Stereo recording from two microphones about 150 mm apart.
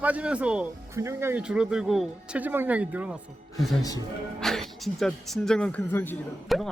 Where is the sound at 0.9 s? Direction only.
20° right (ahead or behind).